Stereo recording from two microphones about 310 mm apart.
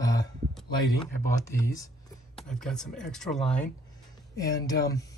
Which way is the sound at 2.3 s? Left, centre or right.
Centre.